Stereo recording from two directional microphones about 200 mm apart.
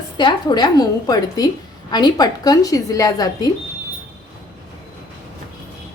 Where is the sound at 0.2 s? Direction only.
20° left (ahead or behind).